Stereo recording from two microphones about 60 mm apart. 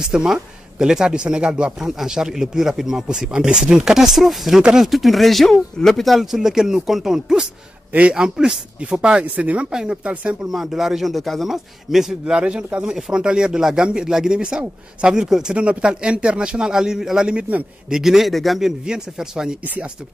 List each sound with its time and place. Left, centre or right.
0.0 s a man's voice: centre
6.3 s a man's voice: centre
7.9 s a man's voice: right
8.2 s a man's voice: centre
10.5 s a man's voice: centre
15.5 s a man's voice: centre
17.8 s a man's voice: centre
18.9 s a man's voice: centre